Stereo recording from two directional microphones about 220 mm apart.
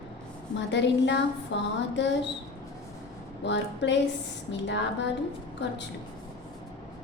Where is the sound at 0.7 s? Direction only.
55° left (ahead or behind).